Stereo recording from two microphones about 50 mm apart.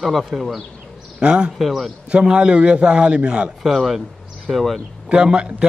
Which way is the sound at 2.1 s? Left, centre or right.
Right.